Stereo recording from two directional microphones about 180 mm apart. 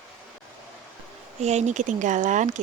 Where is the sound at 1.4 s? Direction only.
40° right (ahead or behind).